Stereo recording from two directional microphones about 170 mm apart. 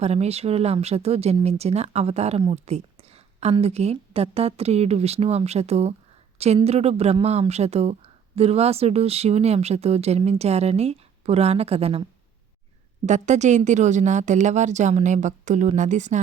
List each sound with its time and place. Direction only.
0.0 s speech: 40° right (ahead or behind)
13.1 s a woman's voice: 45° right (ahead or behind)